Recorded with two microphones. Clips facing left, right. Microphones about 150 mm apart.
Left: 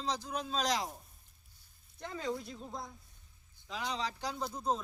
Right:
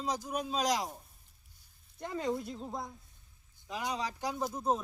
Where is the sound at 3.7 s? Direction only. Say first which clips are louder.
Right 2 dB; 15° right (ahead or behind).